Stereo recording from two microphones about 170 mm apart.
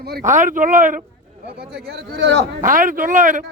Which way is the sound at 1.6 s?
70° right (ahead or behind).